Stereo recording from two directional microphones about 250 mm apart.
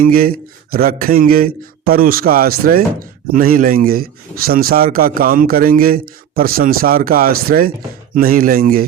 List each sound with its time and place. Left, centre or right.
0.0 s speech: right